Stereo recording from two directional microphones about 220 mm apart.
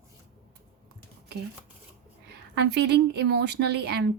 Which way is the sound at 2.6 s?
50° right (ahead or behind).